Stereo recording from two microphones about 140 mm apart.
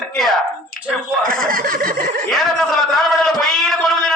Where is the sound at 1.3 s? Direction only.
80° right.